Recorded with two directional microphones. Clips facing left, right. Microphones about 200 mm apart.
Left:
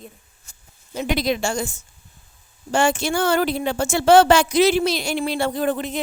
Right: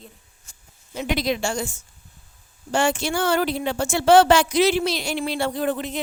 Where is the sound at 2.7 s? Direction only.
45° left (ahead or behind).